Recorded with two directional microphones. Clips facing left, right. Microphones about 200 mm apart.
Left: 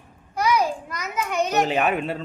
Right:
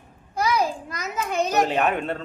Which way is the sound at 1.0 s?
30° right (ahead or behind).